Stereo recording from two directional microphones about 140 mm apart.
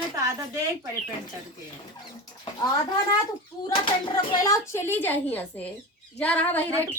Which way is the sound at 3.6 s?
30° left (ahead or behind).